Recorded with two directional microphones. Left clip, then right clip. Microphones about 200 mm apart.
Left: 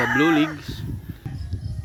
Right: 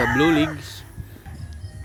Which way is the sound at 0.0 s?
Centre (ahead or behind).